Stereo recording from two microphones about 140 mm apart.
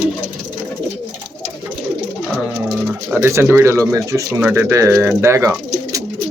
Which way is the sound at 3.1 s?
20° right (ahead or behind).